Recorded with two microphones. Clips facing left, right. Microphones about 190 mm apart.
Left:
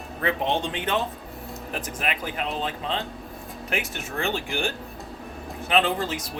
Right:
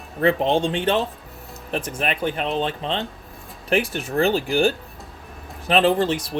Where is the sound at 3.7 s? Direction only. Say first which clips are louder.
Right 9 dB; 35° right (ahead or behind).